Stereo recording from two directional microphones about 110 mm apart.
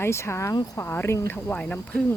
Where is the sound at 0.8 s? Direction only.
20° left (ahead or behind).